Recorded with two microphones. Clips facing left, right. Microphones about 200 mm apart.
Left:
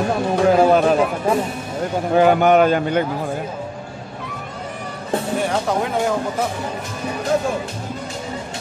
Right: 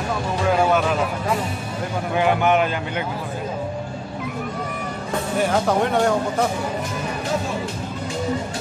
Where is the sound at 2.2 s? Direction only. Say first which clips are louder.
Left 5 dB; 40° left (ahead or behind).